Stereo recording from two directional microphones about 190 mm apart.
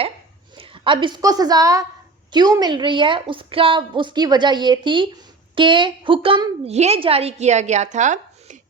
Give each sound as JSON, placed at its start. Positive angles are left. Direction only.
{"t": 0.5, "sound": "a woman's voice", "side_deg": -30}